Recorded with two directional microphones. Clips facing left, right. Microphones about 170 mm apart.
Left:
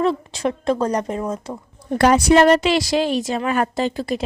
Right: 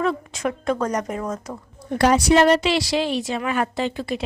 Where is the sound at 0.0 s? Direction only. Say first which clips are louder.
Left 3 dB; 30° left (ahead or behind).